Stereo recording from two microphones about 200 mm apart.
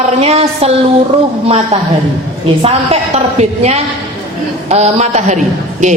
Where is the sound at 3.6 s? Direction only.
35° right (ahead or behind).